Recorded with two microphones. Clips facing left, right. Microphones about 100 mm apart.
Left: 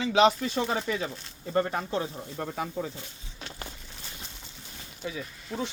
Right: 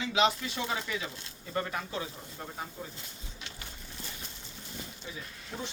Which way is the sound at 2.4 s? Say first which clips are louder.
Left 9 dB; 65° left (ahead or behind).